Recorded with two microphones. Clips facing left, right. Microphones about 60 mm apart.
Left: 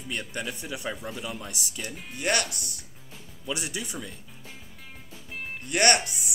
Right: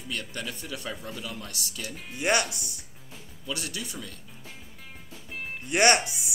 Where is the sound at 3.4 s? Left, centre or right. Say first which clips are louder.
Left 2 dB; centre.